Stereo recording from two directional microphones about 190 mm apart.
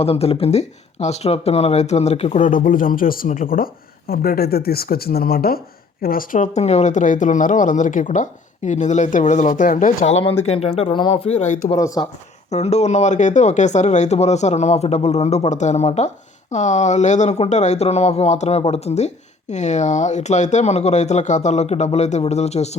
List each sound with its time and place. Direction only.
0.0 s speech: 30° left (ahead or behind)
11.8 s speech: 15° left (ahead or behind)
12.5 s speech: 35° left (ahead or behind)